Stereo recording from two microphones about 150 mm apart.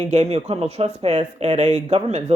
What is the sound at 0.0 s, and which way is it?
Speech, 50° right (ahead or behind).